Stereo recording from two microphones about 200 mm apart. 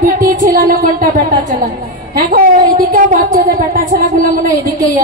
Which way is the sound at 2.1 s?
45° right (ahead or behind).